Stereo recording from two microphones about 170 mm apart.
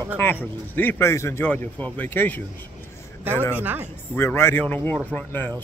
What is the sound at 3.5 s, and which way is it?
Speech, 10° right (ahead or behind).